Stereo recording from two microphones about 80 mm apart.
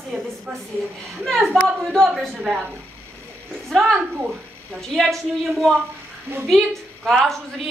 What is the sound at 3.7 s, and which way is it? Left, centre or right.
A woman's voice, centre.